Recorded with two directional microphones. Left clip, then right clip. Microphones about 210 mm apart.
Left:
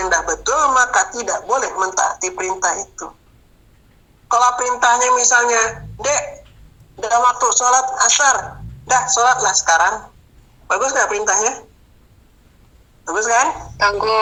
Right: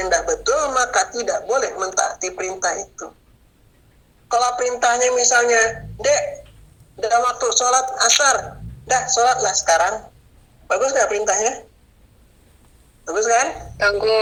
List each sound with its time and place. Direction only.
0.1 s speech: 15° left (ahead or behind)
4.3 s a woman's voice: 15° left (ahead or behind)
13.1 s a woman's voice: 15° left (ahead or behind)